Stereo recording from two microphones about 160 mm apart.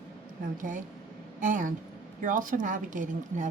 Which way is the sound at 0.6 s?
55° right (ahead or behind).